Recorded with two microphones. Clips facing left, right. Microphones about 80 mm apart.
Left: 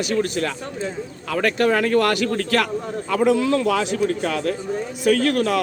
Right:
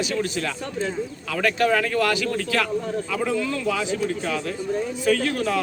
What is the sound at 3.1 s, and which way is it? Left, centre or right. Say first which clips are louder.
A man's voice: left 11 dB; left.